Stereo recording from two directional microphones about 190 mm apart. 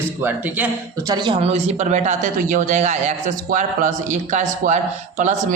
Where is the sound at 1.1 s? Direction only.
25° right (ahead or behind).